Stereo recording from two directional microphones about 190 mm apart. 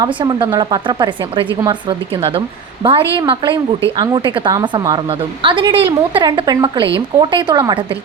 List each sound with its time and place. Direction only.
0.0 s a woman's voice: 25° right (ahead or behind)